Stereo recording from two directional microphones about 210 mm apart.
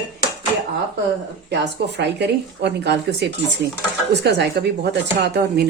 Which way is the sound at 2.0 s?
55° right (ahead or behind).